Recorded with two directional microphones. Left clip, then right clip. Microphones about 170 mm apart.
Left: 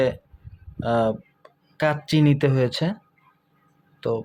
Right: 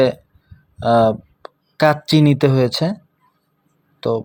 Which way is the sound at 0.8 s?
25° right (ahead or behind).